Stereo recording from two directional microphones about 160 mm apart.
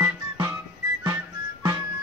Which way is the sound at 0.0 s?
15° right (ahead or behind).